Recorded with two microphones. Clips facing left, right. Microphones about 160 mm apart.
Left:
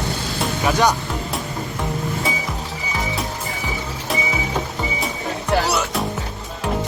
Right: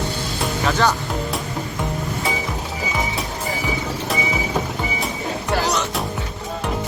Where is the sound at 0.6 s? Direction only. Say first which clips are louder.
Left 2 dB; 15° left (ahead or behind).